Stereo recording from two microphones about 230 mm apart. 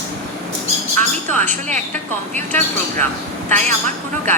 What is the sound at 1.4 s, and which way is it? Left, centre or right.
Speech, right.